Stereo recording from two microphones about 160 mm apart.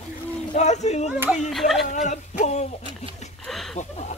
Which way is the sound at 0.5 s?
45° left (ahead or behind).